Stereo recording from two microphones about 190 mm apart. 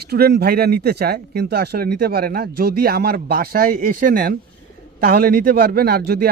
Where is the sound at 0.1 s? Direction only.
55° right (ahead or behind).